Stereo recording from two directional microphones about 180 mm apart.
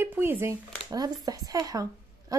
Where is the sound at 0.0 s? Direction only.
10° right (ahead or behind).